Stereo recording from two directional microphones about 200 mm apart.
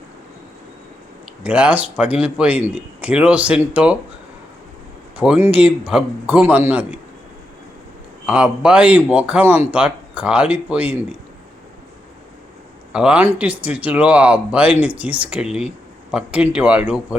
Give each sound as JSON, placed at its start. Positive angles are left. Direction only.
{"t": 1.5, "sound": "speech", "side_deg": -5}
{"t": 5.1, "sound": "speech", "side_deg": -5}
{"t": 8.3, "sound": "speech", "side_deg": -5}
{"t": 12.9, "sound": "speech", "side_deg": -5}